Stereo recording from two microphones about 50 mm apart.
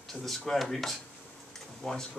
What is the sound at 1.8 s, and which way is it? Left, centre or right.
Speech, centre.